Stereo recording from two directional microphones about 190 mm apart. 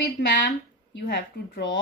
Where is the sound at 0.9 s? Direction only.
60° left (ahead or behind).